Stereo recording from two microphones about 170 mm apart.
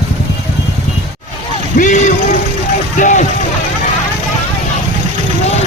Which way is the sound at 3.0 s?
50° left (ahead or behind).